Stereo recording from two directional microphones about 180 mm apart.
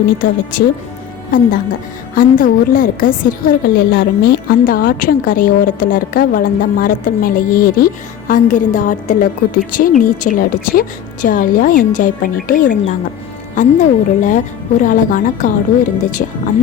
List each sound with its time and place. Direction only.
2.1 s a woman's voice: 50° left (ahead or behind)